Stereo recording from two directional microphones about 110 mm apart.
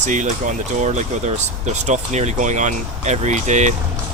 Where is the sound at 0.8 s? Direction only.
90° right.